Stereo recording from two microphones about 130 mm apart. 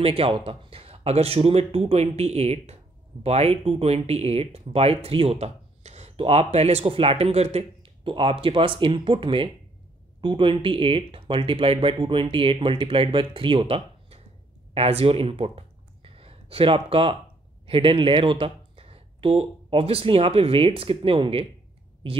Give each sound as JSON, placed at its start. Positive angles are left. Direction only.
{"t": 0.0, "sound": "speech", "side_deg": -45}